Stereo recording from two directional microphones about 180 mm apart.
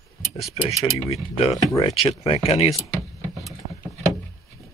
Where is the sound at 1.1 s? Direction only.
35° left (ahead or behind).